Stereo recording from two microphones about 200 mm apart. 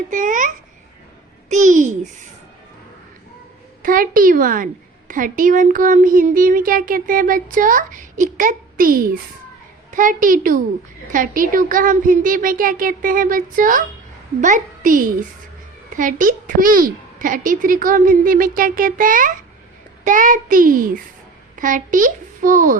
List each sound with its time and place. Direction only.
0.1 s babbling: 40° right (ahead or behind)
1.5 s a child's voice: 40° right (ahead or behind)
3.8 s a woman's voice: 45° right (ahead or behind)